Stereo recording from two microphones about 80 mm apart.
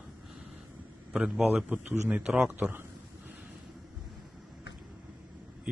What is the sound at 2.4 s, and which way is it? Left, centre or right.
Speech, right.